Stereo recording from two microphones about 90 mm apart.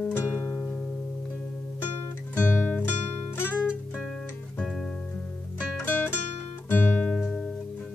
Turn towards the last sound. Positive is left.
turn(degrees=5)  # may be behind; listen again after turning